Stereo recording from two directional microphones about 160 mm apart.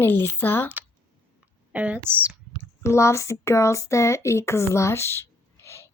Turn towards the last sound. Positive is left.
turn(degrees=15)  # may be behind; listen again after turning